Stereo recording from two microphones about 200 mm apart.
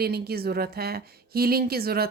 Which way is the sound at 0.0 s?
50° right (ahead or behind).